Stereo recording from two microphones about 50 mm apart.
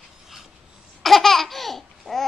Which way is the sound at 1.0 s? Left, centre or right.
Centre.